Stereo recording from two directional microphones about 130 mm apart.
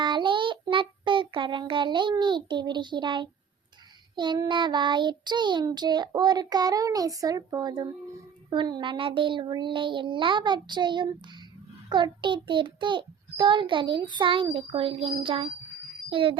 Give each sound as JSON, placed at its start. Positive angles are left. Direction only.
{"t": 0.0, "sound": "child singing", "side_deg": -35}
{"t": 16.0, "sound": "a child's voice", "side_deg": -40}